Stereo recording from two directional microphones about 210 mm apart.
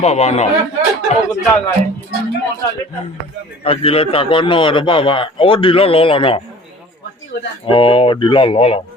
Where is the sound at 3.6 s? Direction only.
25° left (ahead or behind).